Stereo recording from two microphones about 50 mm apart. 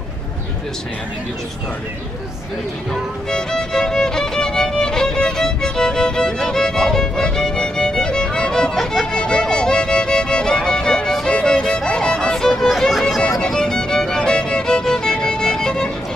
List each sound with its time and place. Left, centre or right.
2.9 s music: centre